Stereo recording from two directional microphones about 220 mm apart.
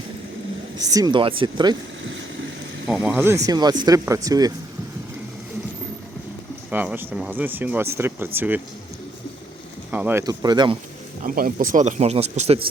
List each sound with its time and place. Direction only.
0.8 s speech: 15° right (ahead or behind)
2.9 s speech: 5° right (ahead or behind)
6.7 s speech: 5° right (ahead or behind)
9.9 s speech: 10° right (ahead or behind)
11.2 s speech: 40° right (ahead or behind)